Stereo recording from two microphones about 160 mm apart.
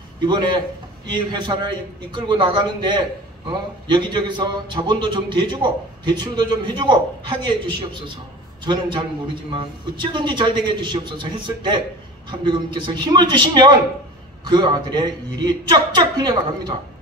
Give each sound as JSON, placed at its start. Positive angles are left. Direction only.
{"t": 0.2, "sound": "a man's voice", "side_deg": -30}